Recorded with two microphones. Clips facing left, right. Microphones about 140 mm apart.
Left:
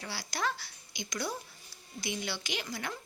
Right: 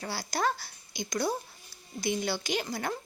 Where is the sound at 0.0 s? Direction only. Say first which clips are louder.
Right 5 dB; 40° right (ahead or behind).